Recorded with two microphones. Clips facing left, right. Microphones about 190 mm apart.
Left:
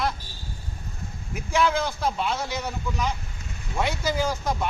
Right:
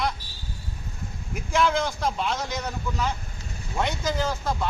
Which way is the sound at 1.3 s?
5° left (ahead or behind).